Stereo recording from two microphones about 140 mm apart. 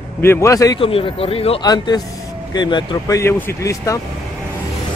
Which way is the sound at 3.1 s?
20° left (ahead or behind).